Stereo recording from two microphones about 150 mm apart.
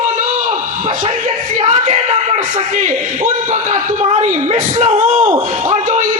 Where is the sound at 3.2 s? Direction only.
55° right (ahead or behind).